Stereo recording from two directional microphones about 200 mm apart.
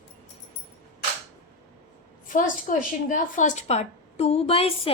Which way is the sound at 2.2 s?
40° left (ahead or behind).